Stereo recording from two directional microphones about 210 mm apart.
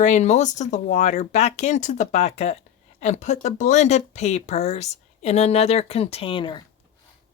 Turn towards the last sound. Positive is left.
turn(degrees=25)  # may be behind; listen again after turning